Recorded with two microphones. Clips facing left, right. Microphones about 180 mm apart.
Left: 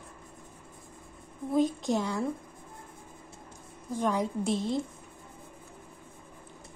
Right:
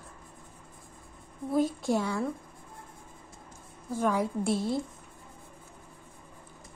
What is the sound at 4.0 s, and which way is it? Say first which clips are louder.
Speech: right 1 dB; 5° right (ahead or behind).